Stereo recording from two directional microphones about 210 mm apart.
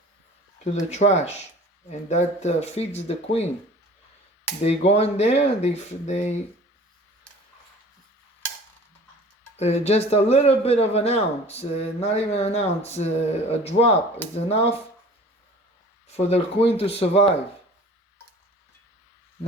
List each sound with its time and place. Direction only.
0.6 s speech: 35° left (ahead or behind)
4.6 s speech: 30° left (ahead or behind)
9.6 s speech: 30° left (ahead or behind)
16.0 s speech: 30° left (ahead or behind)